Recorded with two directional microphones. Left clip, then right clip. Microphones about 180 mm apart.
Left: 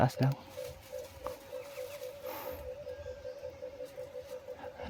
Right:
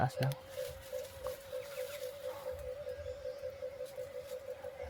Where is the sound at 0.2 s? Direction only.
60° left (ahead or behind).